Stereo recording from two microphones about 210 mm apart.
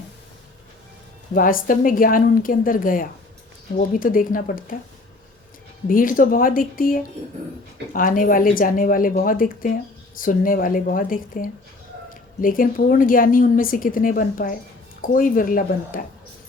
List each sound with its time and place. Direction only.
1.3 s a woman's voice: 40° left (ahead or behind)
5.9 s a woman's voice: 40° left (ahead or behind)